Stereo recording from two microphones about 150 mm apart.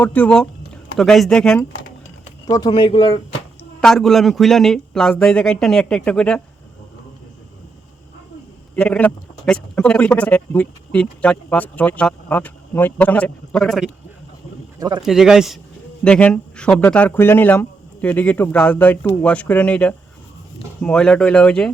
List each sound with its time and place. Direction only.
0.0 s a man's voice: 10° left (ahead or behind)
2.5 s speech: 30° left (ahead or behind)
3.8 s a man's voice: 5° left (ahead or behind)
8.7 s a man's voice: 10° left (ahead or behind)
14.8 s a man's voice: 30° right (ahead or behind)
15.0 s a man's voice: 5° right (ahead or behind)